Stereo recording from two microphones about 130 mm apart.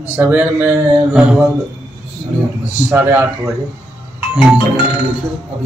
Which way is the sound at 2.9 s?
15° right (ahead or behind).